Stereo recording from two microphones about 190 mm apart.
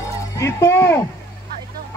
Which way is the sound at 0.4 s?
15° left (ahead or behind).